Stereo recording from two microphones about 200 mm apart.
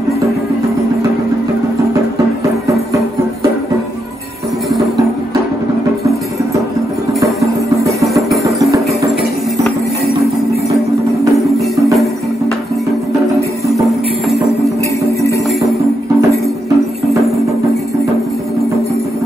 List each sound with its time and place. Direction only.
8.2 s music: centre (ahead or behind)
11.3 s music: centre (ahead or behind)
16.2 s music: 15° right (ahead or behind)